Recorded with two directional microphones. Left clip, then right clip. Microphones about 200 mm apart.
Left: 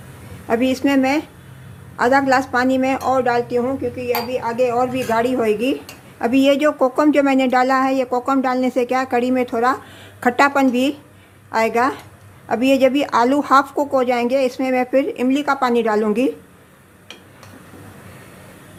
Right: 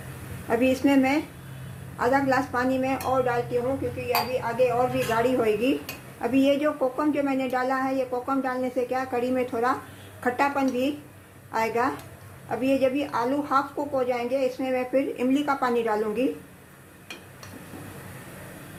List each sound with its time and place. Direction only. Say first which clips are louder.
0.4 s a woman's voice: left 4 dB; 35° left (ahead or behind)